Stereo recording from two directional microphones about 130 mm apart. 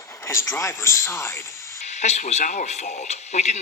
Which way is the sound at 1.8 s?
60° left (ahead or behind).